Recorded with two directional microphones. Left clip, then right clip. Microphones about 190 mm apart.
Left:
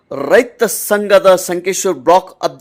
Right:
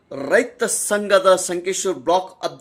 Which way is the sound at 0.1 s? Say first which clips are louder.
Left 7 dB; 45° left (ahead or behind).